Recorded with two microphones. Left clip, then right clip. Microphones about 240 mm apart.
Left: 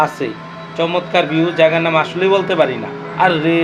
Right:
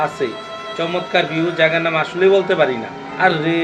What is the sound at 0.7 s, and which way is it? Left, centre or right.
Speech, centre.